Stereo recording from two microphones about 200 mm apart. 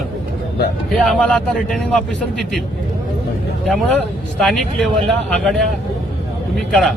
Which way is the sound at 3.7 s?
5° left (ahead or behind).